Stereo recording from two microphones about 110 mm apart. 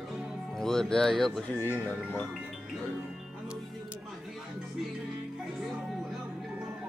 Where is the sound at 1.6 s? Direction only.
20° left (ahead or behind).